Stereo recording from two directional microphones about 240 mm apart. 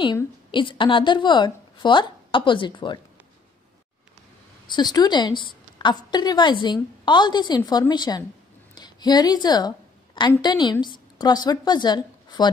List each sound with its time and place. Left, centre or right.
0.0 s a woman's voice: centre
4.6 s a woman's voice: centre